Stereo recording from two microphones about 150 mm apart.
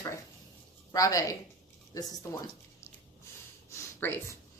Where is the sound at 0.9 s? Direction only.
25° left (ahead or behind).